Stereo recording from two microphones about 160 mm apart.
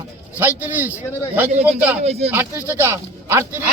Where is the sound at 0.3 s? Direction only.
10° right (ahead or behind).